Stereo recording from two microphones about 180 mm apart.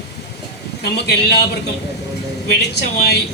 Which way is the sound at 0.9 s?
65° left (ahead or behind).